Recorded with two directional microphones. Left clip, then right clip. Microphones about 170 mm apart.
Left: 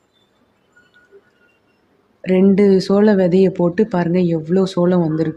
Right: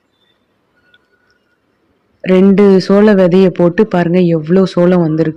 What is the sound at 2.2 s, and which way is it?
Speech, 25° right (ahead or behind).